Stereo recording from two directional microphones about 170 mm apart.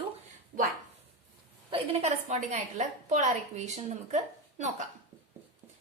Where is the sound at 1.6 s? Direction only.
35° right (ahead or behind).